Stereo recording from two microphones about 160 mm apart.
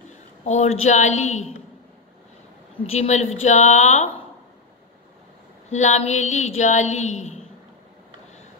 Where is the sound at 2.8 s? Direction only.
45° left (ahead or behind).